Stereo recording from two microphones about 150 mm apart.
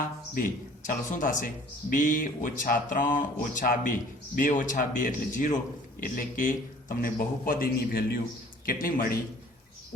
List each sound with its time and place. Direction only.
0.3 s a man's voice: 65° left (ahead or behind); by 9.1 s 80° left